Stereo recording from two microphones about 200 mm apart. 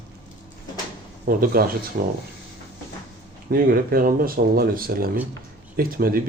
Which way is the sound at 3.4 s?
45° right (ahead or behind).